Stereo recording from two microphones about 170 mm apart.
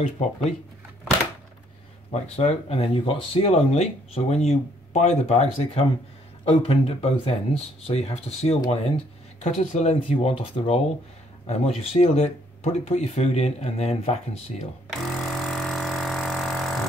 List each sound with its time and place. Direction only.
0.0 s speech: 40° left (ahead or behind)
2.0 s speech: 40° left (ahead or behind)
14.9 s a sound: centre (ahead or behind)